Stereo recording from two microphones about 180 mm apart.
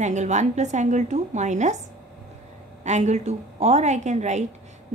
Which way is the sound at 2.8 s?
40° right (ahead or behind).